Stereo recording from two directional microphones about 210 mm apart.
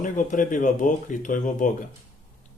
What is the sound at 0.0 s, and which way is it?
Speech, 40° left (ahead or behind).